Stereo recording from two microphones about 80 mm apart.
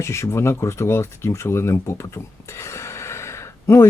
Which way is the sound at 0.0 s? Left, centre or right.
Left.